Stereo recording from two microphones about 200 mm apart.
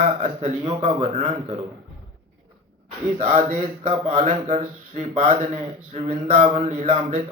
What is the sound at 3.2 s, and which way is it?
Speech, 30° right (ahead or behind).